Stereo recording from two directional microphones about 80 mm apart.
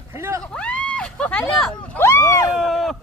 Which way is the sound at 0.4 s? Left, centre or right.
Centre.